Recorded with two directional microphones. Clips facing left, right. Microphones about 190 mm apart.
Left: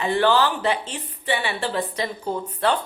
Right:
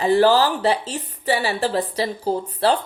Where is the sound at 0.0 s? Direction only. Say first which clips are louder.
Right 4 dB; 40° right (ahead or behind).